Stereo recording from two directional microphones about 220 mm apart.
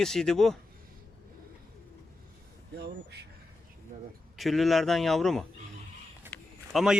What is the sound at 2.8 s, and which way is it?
Speech, 50° right (ahead or behind).